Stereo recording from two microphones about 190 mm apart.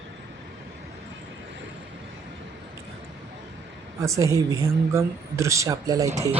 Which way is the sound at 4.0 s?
15° right (ahead or behind).